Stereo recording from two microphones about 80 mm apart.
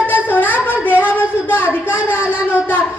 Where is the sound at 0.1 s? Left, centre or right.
Left.